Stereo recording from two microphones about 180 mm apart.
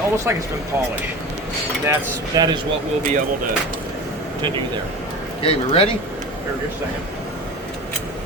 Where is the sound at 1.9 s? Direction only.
20° right (ahead or behind).